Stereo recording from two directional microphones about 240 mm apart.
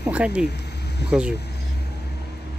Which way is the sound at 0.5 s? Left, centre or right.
Left.